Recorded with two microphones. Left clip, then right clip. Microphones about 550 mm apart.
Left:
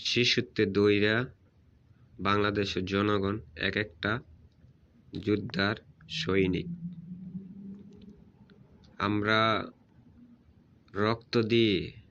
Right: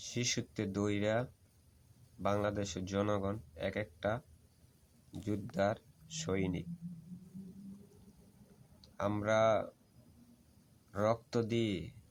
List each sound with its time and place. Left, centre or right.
0.0 s speech: right
9.0 s speech: right
10.9 s speech: right